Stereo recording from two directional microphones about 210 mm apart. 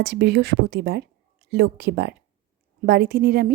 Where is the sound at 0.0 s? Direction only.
55° right (ahead or behind).